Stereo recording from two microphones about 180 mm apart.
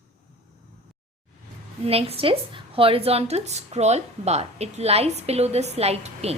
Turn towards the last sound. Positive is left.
turn(degrees=-35)  # may be behind; listen again after turning